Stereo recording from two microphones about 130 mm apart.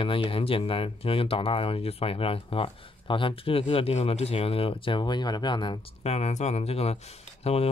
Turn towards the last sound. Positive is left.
turn(degrees=50)  # may be behind; listen again after turning